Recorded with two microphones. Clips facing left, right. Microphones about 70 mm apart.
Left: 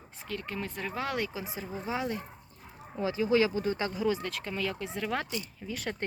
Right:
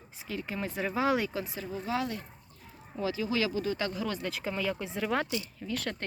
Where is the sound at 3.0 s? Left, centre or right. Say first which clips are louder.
Left 4 dB; left.